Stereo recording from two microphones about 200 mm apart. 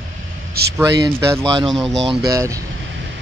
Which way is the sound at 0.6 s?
50° right (ahead or behind).